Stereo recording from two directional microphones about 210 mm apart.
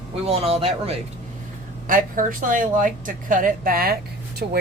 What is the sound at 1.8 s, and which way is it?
A woman's voice, 40° right (ahead or behind).